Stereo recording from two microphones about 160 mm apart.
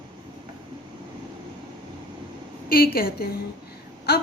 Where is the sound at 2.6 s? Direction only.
70° left (ahead or behind).